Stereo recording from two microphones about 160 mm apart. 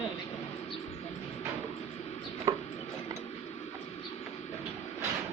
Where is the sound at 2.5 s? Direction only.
20° right (ahead or behind).